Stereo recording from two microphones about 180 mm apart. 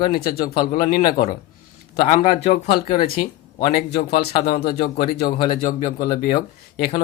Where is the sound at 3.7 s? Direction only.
60° left (ahead or behind).